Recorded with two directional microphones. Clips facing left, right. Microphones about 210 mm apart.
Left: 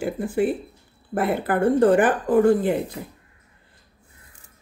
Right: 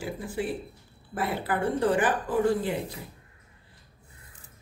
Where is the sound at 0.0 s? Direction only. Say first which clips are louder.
Left 9 dB; 55° left (ahead or behind).